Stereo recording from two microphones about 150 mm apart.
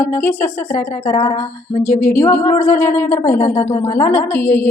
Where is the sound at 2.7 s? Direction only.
15° left (ahead or behind).